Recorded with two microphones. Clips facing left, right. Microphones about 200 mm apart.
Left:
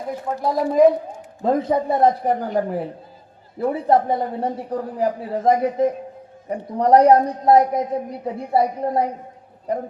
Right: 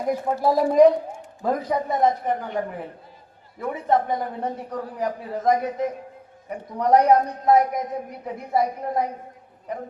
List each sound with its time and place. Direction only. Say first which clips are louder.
0.1 s a woman's voice: right 2 dB; centre (ahead or behind)
1.4 s a woman's voice: left 5 dB; 25° left (ahead or behind)